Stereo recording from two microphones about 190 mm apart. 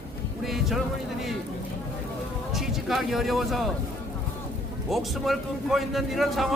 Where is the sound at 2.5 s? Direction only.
Centre (ahead or behind).